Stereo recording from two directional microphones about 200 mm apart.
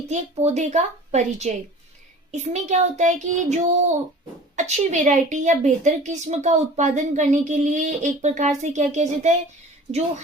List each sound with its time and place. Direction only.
0.1 s a woman's voice: 35° right (ahead or behind)